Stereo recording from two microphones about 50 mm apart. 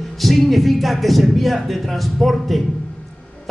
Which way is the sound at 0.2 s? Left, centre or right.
Centre.